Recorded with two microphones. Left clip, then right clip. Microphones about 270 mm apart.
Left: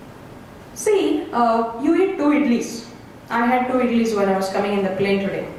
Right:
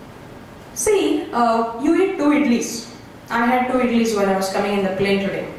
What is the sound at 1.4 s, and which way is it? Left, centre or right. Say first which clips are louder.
A woman's voice: even; centre.